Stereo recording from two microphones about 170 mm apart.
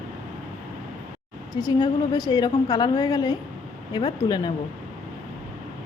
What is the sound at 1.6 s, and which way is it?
A woman's voice, 20° left (ahead or behind).